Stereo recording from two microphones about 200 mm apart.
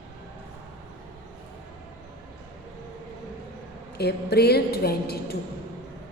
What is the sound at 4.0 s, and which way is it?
A woman's voice, 55° left (ahead or behind).